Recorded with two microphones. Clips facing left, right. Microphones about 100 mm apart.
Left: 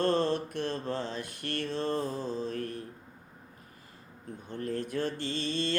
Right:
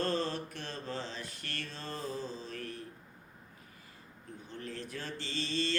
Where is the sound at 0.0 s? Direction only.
55° left (ahead or behind).